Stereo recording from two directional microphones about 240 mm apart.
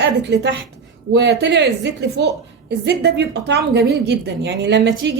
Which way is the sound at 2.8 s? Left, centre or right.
Right.